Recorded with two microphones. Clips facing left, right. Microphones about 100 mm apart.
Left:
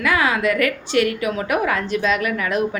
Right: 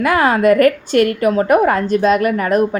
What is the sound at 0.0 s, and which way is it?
A woman's voice, 45° right (ahead or behind).